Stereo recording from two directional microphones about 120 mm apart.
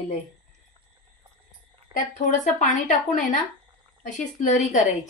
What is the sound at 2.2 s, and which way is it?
A woman's voice, 90° left.